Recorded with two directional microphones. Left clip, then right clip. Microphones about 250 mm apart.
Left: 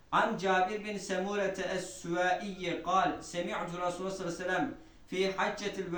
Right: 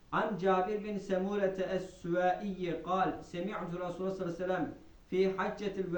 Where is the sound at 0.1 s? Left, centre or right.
Left.